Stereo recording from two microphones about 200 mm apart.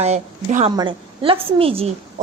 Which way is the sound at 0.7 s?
25° right (ahead or behind).